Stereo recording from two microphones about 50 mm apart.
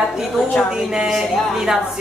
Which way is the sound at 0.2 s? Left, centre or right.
Centre.